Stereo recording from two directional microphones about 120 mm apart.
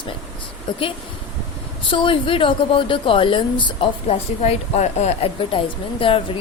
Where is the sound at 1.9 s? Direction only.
45° left (ahead or behind).